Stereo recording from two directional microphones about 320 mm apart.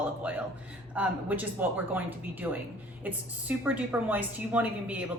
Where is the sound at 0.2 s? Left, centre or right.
Centre.